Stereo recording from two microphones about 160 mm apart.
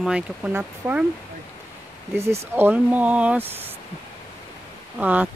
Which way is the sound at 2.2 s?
15° right (ahead or behind).